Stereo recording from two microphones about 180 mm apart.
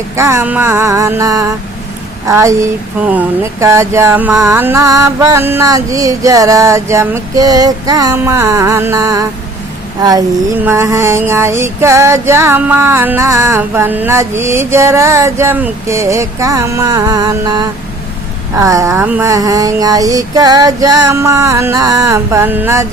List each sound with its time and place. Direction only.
0.2 s music: 15° right (ahead or behind)
10.0 s a sound: 20° right (ahead or behind)
10.6 s music: 15° right (ahead or behind)